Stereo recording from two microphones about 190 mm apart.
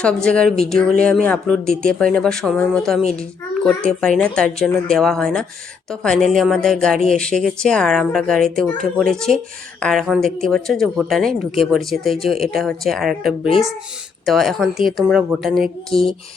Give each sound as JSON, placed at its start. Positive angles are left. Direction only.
{"t": 0.0, "sound": "speech", "side_deg": 5}